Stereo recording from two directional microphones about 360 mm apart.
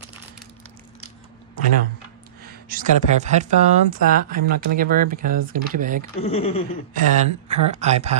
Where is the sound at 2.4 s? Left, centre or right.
Right.